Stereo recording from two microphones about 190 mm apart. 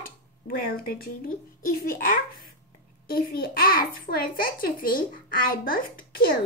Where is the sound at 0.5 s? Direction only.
50° left (ahead or behind).